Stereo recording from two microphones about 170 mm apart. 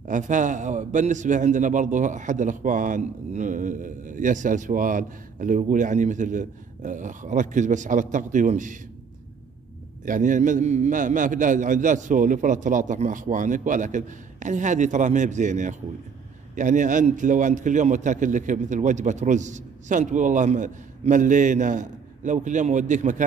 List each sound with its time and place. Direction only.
0.0 s a man's voice: 50° right (ahead or behind)
10.0 s a man's voice: 50° right (ahead or behind)